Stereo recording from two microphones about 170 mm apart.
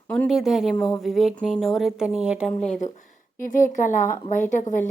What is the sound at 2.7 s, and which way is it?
A woman's voice, 45° left (ahead or behind).